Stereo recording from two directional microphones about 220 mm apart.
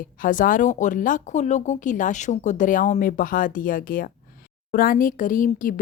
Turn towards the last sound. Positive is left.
turn(degrees=35)  # may be behind; listen again after turning